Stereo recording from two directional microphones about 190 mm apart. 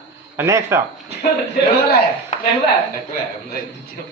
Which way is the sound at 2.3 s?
40° left (ahead or behind).